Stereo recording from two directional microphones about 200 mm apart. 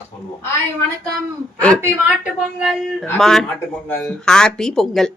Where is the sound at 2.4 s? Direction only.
Centre (ahead or behind).